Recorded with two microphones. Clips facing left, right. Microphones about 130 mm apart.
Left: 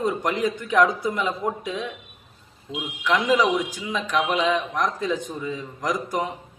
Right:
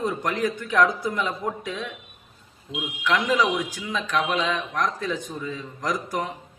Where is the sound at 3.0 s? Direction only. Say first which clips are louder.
Left 2 dB; 15° left (ahead or behind).